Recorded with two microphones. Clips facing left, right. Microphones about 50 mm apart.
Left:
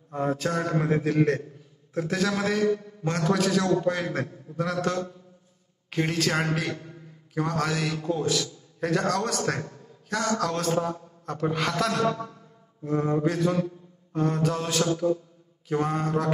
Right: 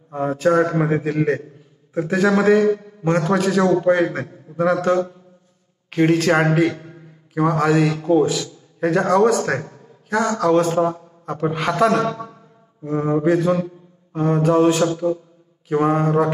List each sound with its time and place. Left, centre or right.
0.1 s a man's voice: right
6.7 s a sound: right
7.3 s a man's voice: centre
7.7 s speech: right
8.0 s a man's voice: right
8.8 s a man's voice: right
10.0 s a man's voice: right
12.9 s speech: right
13.4 s mantra: right
15.7 s speech: right